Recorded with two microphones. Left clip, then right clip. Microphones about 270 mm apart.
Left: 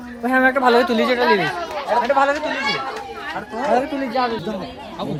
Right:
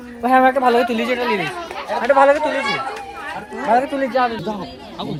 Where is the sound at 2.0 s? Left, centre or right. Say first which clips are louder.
Right 6 dB; right.